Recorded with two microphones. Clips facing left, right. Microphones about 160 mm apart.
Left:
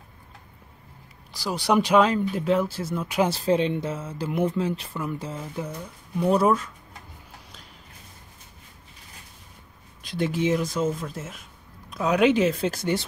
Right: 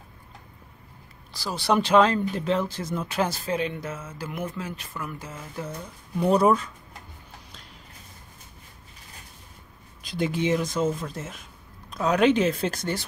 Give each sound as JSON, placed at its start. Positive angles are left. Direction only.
{"t": 1.3, "sound": "speech", "side_deg": 15}
{"t": 3.3, "sound": "speech", "side_deg": 30}
{"t": 6.2, "sound": "speech", "side_deg": 0}
{"t": 10.0, "sound": "speech", "side_deg": 0}